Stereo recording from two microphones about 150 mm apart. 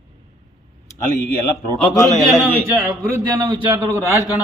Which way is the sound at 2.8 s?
20° right (ahead or behind).